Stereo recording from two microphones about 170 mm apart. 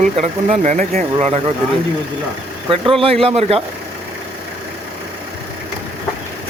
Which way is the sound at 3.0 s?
35° right (ahead or behind).